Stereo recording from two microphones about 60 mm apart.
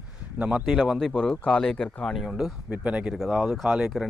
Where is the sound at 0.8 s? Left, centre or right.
Centre.